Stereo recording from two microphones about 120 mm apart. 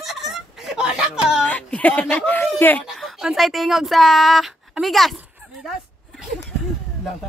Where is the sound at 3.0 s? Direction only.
Centre (ahead or behind).